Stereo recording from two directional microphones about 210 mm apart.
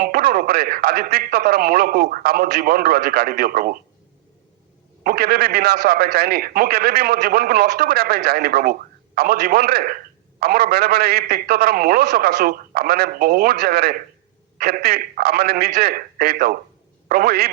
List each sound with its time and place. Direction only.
0.0 s a man's voice: 45° right (ahead or behind)
5.0 s a man's voice: 45° right (ahead or behind)